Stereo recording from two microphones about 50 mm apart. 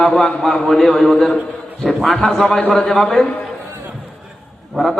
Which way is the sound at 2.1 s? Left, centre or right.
Centre.